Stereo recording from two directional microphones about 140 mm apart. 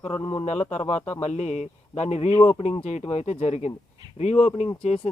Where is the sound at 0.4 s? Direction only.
55° left (ahead or behind).